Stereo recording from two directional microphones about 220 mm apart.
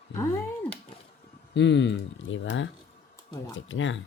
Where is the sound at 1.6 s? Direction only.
55° left (ahead or behind).